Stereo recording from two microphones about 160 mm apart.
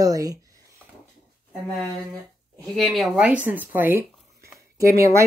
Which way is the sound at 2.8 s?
Centre (ahead or behind).